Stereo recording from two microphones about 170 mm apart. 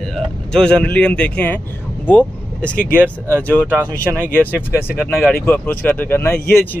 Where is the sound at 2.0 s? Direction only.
10° left (ahead or behind).